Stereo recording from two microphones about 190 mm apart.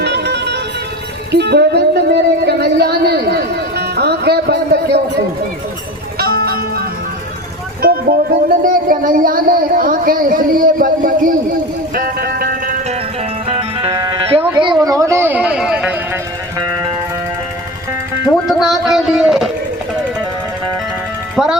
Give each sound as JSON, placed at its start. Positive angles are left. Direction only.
{"t": 0.0, "sound": "music", "side_deg": -60}
{"t": 1.3, "sound": "speech", "side_deg": -60}
{"t": 6.1, "sound": "music", "side_deg": -55}
{"t": 13.5, "sound": "music", "side_deg": -30}
{"t": 14.5, "sound": "a sound", "side_deg": -25}
{"t": 18.4, "sound": "a sound", "side_deg": 0}
{"t": 21.3, "sound": "music", "side_deg": -5}